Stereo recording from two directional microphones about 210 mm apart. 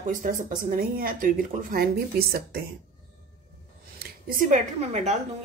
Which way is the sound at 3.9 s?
45° right (ahead or behind).